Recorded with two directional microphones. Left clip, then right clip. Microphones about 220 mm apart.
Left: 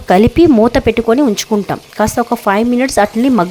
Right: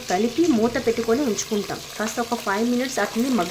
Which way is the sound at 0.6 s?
40° left (ahead or behind).